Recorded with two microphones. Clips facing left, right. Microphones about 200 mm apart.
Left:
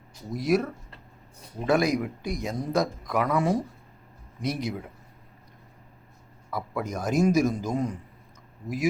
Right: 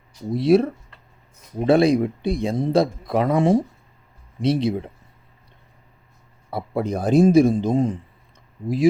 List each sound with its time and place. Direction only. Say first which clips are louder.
0.3 s a man's voice: right 8 dB; 30° right (ahead or behind)
6.5 s a man's voice: right 7 dB; 30° right (ahead or behind)